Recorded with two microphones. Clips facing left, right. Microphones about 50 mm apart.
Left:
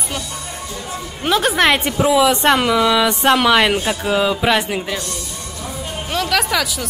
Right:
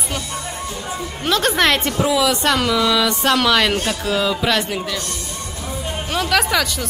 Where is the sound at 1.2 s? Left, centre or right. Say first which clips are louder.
Left 2 dB; centre.